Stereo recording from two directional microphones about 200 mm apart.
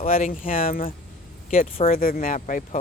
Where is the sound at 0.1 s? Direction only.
40° left (ahead or behind).